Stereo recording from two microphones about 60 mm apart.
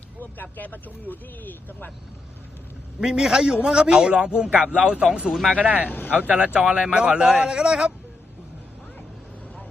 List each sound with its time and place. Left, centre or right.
0.5 s speech: left
3.0 s a man's voice: centre
5.3 s speech: centre
5.5 s speech: right
5.9 s speech: left
6.3 s a man's voice: centre